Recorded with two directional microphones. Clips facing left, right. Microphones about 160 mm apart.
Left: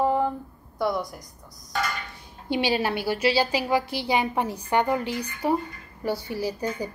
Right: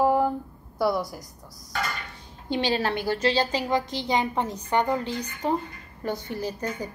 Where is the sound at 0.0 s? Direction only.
5° right (ahead or behind).